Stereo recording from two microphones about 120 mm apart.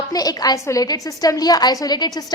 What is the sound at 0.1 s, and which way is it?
A woman's voice, 30° left (ahead or behind).